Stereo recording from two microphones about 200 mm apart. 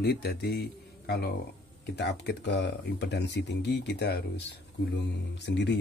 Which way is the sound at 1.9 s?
60° left (ahead or behind).